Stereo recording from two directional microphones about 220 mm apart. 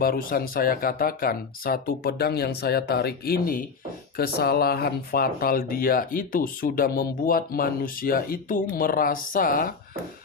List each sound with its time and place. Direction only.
0.0 s speech: 40° left (ahead or behind)